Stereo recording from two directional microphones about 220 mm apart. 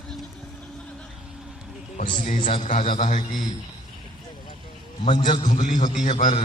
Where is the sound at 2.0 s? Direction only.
35° left (ahead or behind).